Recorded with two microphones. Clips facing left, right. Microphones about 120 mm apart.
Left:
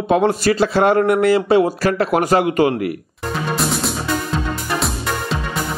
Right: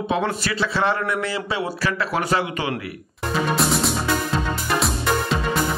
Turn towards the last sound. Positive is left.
turn(degrees=0)  # may be behind; listen again after turning